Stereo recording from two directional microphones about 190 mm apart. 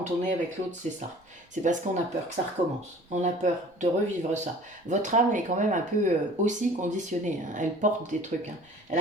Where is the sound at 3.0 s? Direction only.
40° right (ahead or behind).